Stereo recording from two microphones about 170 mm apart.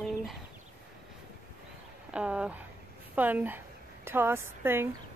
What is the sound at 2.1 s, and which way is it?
Speech, 5° right (ahead or behind).